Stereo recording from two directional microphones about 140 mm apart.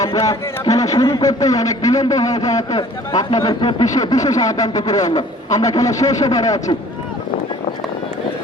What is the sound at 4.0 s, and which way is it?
A man's voice, 25° left (ahead or behind).